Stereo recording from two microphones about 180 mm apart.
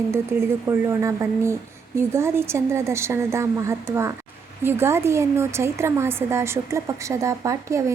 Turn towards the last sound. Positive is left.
turn(degrees=-15)  # may be behind; listen again after turning